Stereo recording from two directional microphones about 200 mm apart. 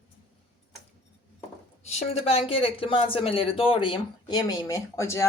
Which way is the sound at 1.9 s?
30° left (ahead or behind).